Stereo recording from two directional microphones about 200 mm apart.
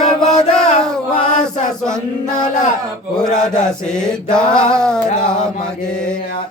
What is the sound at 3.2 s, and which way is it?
Mantra, 5° left (ahead or behind).